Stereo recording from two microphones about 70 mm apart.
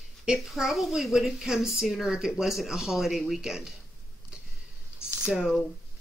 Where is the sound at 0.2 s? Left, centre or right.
Centre.